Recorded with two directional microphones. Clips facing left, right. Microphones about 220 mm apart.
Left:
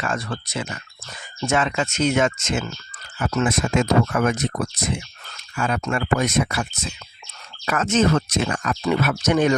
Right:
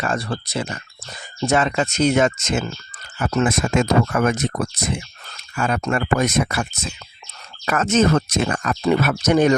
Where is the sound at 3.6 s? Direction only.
50° right (ahead or behind).